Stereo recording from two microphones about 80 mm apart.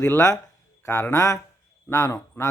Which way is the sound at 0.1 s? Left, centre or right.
Left.